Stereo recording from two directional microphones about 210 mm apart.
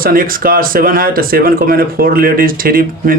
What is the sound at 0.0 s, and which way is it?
Speech, 45° right (ahead or behind).